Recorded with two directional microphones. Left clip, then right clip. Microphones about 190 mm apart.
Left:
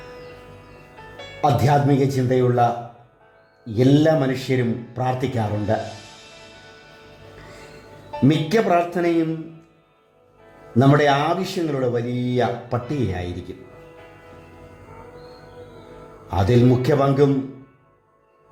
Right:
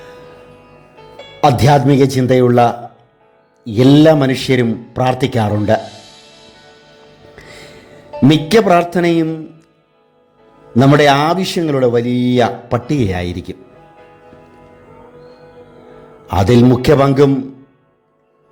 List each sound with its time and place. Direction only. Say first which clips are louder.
0.9 s speech: right 8 dB; 35° right (ahead or behind)
3.7 s speech: right 8 dB; 30° right (ahead or behind)
8.1 s speech: right 8 dB; 30° right (ahead or behind)
10.8 s speech: right 7 dB; 30° right (ahead or behind)
16.3 s speech: right 7 dB; 30° right (ahead or behind)